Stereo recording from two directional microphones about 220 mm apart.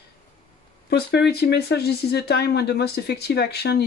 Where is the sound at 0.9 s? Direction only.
50° left (ahead or behind).